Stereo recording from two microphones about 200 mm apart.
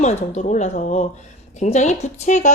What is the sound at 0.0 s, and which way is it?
Speech, 35° left (ahead or behind).